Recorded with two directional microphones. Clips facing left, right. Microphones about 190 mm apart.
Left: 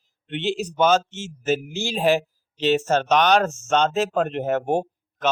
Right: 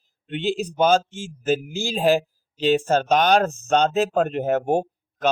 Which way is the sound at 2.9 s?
45° right (ahead or behind).